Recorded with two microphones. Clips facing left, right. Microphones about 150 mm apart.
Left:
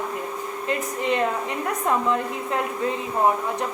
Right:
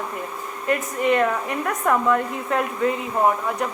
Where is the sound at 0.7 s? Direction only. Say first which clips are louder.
Right 4 dB; 20° left (ahead or behind).